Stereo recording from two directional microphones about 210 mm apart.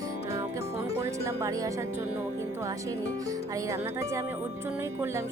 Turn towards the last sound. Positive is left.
turn(degrees=-15)  # may be behind; listen again after turning